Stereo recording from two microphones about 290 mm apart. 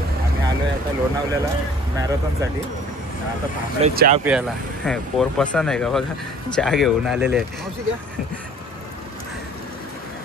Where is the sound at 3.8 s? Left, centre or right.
Right.